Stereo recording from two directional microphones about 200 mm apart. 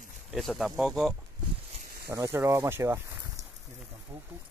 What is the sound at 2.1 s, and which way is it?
Speech, 15° right (ahead or behind).